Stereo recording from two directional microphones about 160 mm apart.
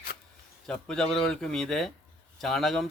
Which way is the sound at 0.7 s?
5° left (ahead or behind).